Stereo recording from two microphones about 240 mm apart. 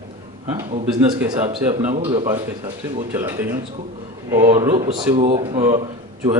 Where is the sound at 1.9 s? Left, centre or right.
Right.